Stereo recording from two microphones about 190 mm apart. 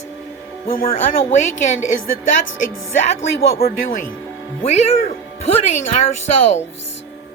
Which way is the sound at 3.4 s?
55° left (ahead or behind).